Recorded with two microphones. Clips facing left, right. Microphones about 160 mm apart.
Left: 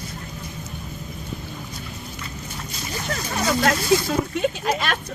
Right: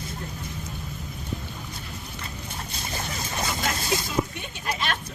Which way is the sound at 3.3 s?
85° left.